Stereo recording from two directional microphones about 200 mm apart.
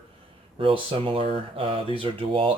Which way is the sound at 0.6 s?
25° right (ahead or behind).